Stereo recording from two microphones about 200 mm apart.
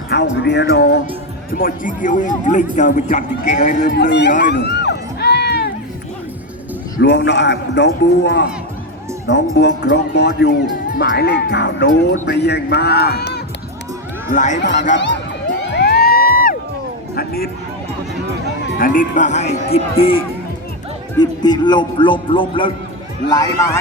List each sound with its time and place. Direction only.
0.1 s speech: 60° left (ahead or behind)
1.5 s speech: 45° left (ahead or behind)
3.8 s speech: 60° left (ahead or behind)
4.4 s music: 60° left (ahead or behind)
7.0 s speech: 60° left (ahead or behind)
14.3 s speech: 40° left (ahead or behind)
14.6 s speech: 60° left (ahead or behind)
15.7 s music: 55° left (ahead or behind)
17.2 s a sound: 50° left (ahead or behind)
18.8 s speech: 45° left (ahead or behind); by 23.6 s 20° left (ahead or behind)